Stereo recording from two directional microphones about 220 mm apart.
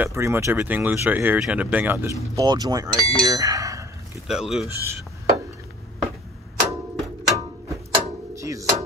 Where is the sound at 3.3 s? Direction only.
15° right (ahead or behind).